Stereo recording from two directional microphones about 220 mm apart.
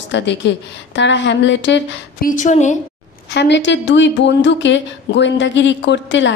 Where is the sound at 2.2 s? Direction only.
35° left (ahead or behind).